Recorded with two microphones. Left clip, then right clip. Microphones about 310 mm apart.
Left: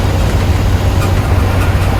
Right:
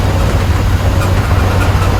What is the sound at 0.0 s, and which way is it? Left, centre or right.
Vehicle, centre.